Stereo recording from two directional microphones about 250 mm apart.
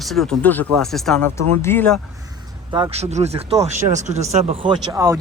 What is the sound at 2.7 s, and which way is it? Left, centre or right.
Speech, right.